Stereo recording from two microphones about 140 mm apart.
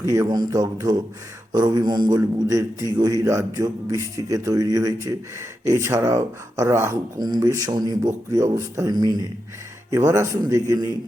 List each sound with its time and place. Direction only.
0.0 s a man's voice: 25° right (ahead or behind)